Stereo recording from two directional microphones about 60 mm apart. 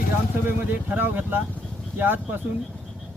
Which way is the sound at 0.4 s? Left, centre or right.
Right.